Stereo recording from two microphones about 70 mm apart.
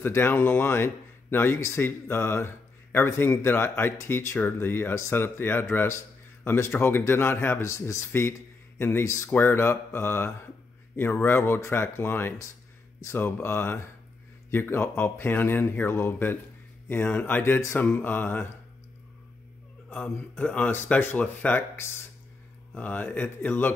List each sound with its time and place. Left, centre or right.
0.0 s speech: left
7.6 s speech: left
17.4 s speech: left
17.7 s speech: left
19.9 s speech: left